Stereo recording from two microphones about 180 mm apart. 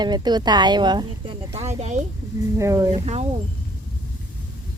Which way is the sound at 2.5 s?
15° right (ahead or behind).